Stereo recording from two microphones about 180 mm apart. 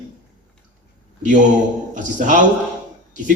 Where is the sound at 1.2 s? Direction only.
45° right (ahead or behind).